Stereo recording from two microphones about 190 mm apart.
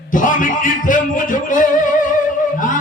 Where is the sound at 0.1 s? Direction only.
45° left (ahead or behind).